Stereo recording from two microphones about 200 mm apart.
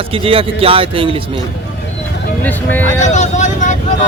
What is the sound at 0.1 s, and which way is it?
A man's voice, 25° right (ahead or behind).